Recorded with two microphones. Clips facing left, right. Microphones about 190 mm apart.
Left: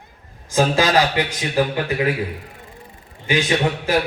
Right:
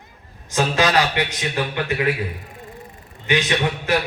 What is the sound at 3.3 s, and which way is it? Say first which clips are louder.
Speech: left 2 dB; 30° left (ahead or behind).